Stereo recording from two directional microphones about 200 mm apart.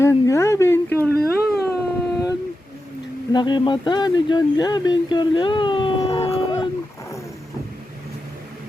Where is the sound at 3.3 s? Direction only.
20° left (ahead or behind).